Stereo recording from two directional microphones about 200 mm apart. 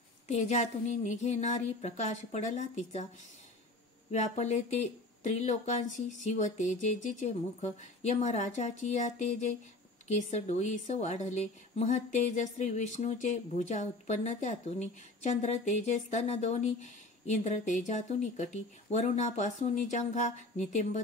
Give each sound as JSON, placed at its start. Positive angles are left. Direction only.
{"t": 0.3, "sound": "a woman's voice", "side_deg": 35}
{"t": 4.1, "sound": "a woman's voice", "side_deg": 35}